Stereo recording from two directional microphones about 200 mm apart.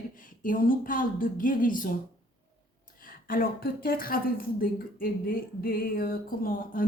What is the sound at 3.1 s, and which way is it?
A woman's voice, 45° left (ahead or behind).